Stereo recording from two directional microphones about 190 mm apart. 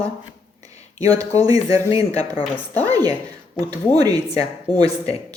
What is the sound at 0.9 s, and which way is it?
Speech, 20° right (ahead or behind).